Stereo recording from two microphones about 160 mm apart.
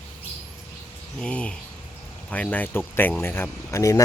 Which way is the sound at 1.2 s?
5° left (ahead or behind).